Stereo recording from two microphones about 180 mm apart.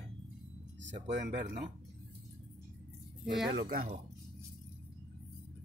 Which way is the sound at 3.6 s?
55° right (ahead or behind).